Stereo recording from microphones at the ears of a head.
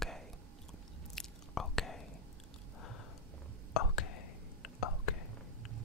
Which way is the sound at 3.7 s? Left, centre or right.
Left.